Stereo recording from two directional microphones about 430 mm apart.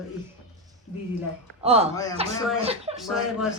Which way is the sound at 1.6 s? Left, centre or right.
Centre.